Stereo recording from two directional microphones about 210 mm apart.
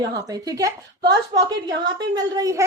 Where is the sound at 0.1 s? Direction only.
15° right (ahead or behind).